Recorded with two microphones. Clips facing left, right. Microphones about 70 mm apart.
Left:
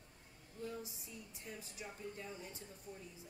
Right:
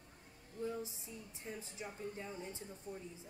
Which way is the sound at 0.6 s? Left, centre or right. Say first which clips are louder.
Right 4 dB; right.